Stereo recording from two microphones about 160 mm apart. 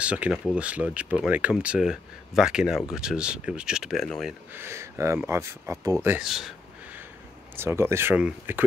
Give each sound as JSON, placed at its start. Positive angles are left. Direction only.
{"t": 0.0, "sound": "speech", "side_deg": -5}
{"t": 4.6, "sound": "speech", "side_deg": -15}
{"t": 6.2, "sound": "speech", "side_deg": 0}
{"t": 7.5, "sound": "speech", "side_deg": -15}